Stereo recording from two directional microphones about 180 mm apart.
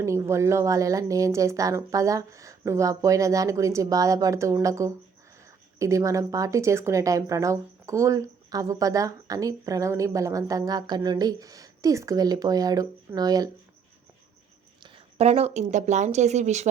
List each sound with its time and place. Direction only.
0.0 s speech: 15° right (ahead or behind)
14.8 s speech: 30° right (ahead or behind)